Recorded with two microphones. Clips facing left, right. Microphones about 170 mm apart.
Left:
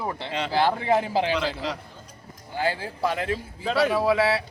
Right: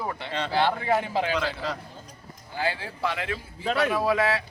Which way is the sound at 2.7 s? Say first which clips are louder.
Left 3 dB; 40° left (ahead or behind).